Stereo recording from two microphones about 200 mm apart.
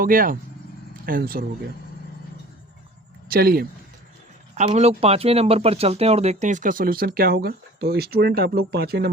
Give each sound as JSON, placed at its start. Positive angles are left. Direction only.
{"t": 0.0, "sound": "speech", "side_deg": -45}
{"t": 3.2, "sound": "speech", "side_deg": -50}
{"t": 4.5, "sound": "speech", "side_deg": -35}